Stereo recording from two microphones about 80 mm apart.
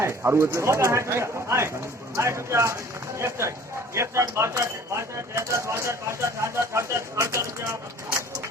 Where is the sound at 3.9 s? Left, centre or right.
Right.